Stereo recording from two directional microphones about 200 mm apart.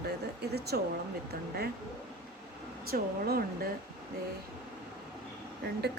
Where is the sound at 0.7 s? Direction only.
50° right (ahead or behind).